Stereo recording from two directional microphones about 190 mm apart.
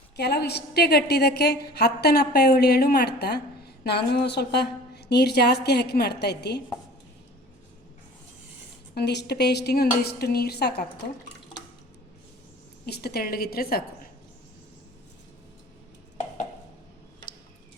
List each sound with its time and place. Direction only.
0.2 s a woman's voice: 60° left (ahead or behind)
9.0 s a woman's voice: 60° left (ahead or behind)
12.8 s a woman's voice: 55° left (ahead or behind)